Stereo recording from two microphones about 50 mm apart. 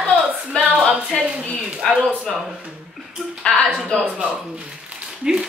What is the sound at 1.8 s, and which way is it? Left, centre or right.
Speech, centre.